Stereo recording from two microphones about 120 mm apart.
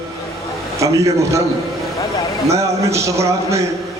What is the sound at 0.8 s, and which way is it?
Speech, 25° right (ahead or behind).